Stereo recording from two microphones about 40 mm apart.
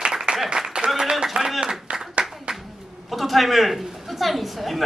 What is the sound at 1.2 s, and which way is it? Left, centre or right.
Clapping, centre.